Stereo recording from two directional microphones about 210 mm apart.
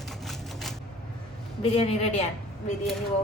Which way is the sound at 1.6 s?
30° left (ahead or behind).